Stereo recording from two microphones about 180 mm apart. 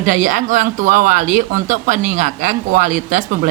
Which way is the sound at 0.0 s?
45° right (ahead or behind).